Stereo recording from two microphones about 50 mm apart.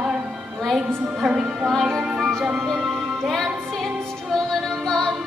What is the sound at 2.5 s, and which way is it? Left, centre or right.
Music, centre.